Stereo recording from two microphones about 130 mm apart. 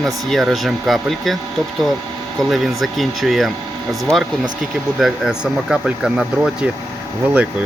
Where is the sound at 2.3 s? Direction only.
Centre (ahead or behind).